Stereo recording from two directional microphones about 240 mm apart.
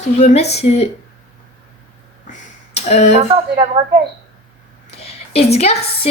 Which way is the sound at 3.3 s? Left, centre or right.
Right.